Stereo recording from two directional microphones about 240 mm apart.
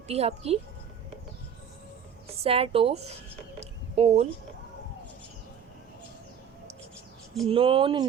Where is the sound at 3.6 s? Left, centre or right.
Right.